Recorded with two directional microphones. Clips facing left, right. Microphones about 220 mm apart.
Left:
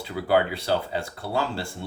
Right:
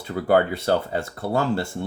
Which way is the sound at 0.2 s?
50° right (ahead or behind).